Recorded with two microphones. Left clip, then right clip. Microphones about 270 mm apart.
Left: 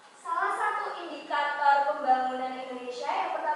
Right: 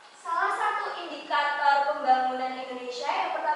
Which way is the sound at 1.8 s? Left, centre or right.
Centre.